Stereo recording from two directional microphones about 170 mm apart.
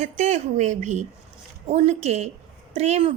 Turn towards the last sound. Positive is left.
turn(degrees=-40)  # may be behind; listen again after turning